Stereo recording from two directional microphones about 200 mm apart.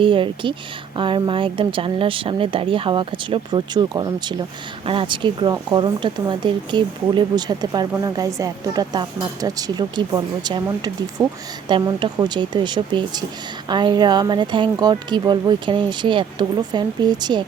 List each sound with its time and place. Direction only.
0.0 s speech: 25° right (ahead or behind)